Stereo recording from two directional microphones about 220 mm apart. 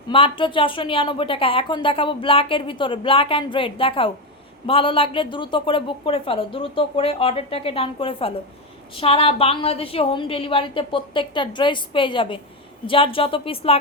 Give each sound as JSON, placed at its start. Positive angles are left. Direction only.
{"t": 0.1, "sound": "a woman's voice", "side_deg": 25}